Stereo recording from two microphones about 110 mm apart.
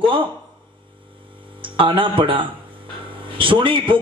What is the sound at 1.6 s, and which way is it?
A man's voice, 50° right (ahead or behind).